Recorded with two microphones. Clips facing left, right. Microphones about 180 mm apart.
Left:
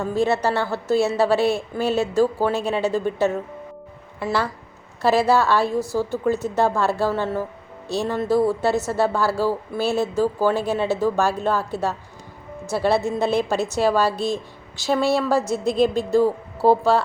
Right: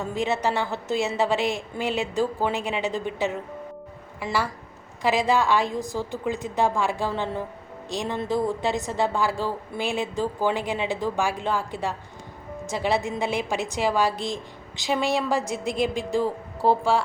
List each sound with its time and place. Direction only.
0.0 s a woman's voice: 15° right (ahead or behind)